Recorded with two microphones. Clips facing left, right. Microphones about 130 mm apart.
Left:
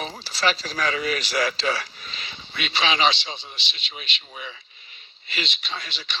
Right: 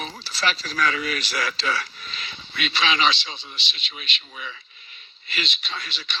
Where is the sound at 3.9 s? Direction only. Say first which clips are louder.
Even; 25° left (ahead or behind).